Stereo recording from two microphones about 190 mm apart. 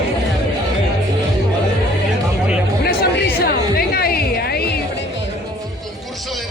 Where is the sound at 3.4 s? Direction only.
55° left (ahead or behind).